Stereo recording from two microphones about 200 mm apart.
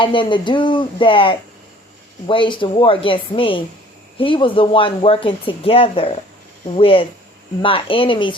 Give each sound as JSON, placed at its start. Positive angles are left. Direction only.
{"t": 0.0, "sound": "speech", "side_deg": 25}